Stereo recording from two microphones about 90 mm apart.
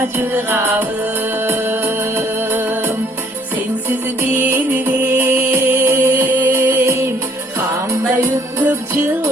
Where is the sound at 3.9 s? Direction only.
25° right (ahead or behind).